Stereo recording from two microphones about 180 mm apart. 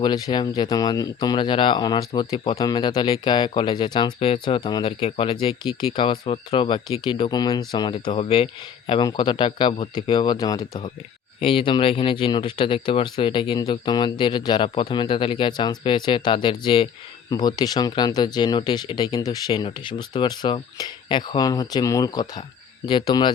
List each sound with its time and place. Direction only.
0.0 s speech: 25° left (ahead or behind)